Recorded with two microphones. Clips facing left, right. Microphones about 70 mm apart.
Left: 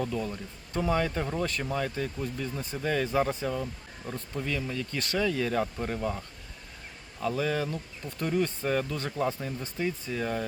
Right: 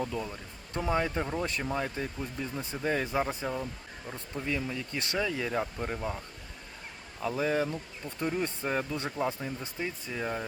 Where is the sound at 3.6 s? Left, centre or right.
Centre.